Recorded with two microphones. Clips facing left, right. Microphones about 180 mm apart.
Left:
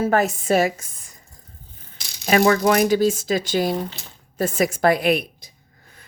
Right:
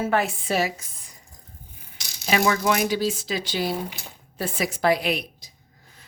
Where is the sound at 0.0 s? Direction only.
45° left (ahead or behind).